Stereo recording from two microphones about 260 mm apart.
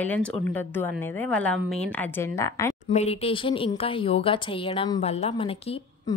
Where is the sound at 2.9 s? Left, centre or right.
Left.